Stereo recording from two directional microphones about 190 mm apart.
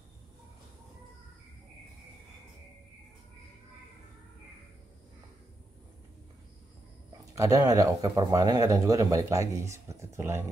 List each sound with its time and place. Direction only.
7.3 s speech: 20° right (ahead or behind)